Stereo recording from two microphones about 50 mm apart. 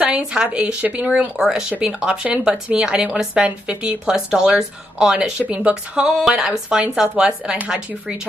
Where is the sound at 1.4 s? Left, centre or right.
Centre.